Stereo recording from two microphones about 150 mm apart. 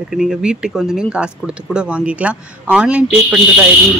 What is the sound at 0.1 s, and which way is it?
Speech, 5° right (ahead or behind).